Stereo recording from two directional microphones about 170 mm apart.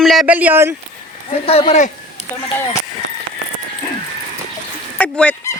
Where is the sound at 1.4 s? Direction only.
35° left (ahead or behind).